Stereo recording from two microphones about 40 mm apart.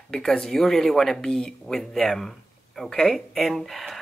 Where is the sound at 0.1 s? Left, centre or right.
Centre.